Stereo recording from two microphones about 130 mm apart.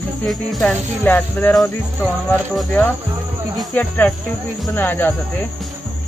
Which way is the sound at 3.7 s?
10° left (ahead or behind).